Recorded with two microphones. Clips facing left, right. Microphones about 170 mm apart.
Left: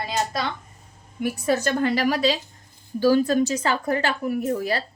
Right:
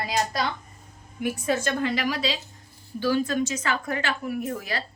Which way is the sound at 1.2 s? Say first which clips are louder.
Left 3 dB; 40° left (ahead or behind).